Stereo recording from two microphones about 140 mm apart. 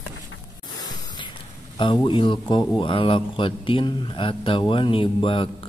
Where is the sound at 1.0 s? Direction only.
35° left (ahead or behind).